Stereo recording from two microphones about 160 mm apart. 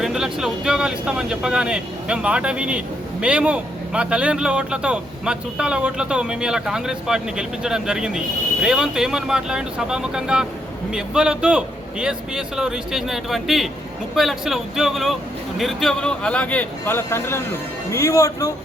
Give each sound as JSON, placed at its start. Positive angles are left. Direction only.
{"t": 0.0, "sound": "a man's voice", "side_deg": -5}